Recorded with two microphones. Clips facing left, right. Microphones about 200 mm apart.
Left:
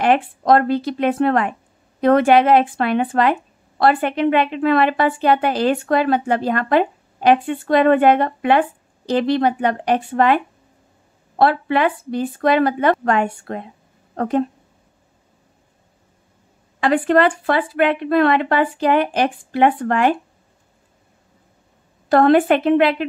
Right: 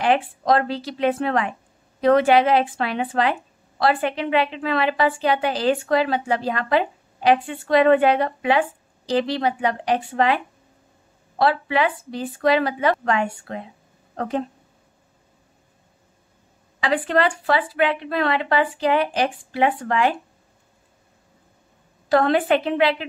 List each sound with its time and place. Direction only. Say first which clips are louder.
0.0 s a woman's voice: left 3 dB; 50° left (ahead or behind)
16.8 s a woman's voice: left 5 dB; 50° left (ahead or behind)
22.1 s a woman's voice: left 5 dB; 55° left (ahead or behind)